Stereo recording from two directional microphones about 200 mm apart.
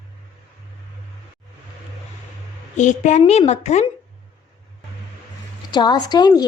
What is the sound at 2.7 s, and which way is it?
A woman's voice, 35° left (ahead or behind).